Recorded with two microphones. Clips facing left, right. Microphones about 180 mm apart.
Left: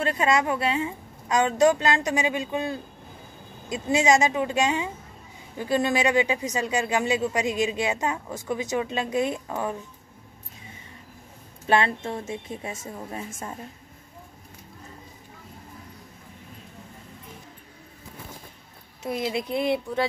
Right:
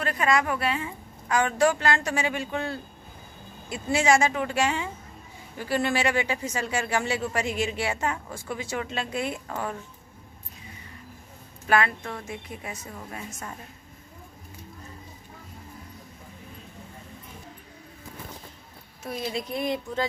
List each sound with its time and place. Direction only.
0.0 s a woman's voice: 25° left (ahead or behind)
11.6 s a woman's voice: 25° left (ahead or behind)
19.0 s speech: 20° left (ahead or behind)